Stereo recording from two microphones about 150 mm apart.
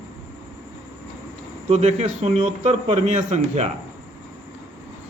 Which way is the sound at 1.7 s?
50° right (ahead or behind).